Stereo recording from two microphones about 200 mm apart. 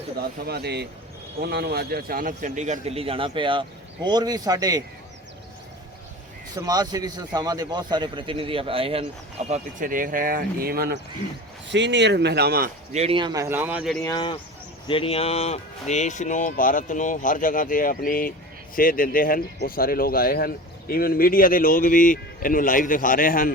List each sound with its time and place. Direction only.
0.2 s a man's voice: 55° right (ahead or behind); by 4.8 s 20° right (ahead or behind)
6.5 s a man's voice: 20° right (ahead or behind)
9.5 s speech: 40° right (ahead or behind)
12.9 s speech: 30° right (ahead or behind); by 14.0 s 5° right (ahead or behind)
14.0 s speech: 20° left (ahead or behind); by 23.5 s 45° left (ahead or behind)